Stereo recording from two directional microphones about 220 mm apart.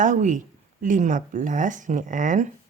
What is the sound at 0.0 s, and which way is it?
Speech, 35° right (ahead or behind).